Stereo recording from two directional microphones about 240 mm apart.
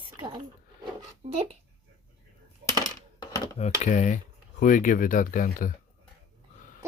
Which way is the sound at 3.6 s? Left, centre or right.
Left.